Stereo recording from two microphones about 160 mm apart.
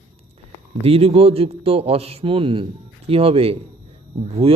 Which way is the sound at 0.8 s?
35° right (ahead or behind).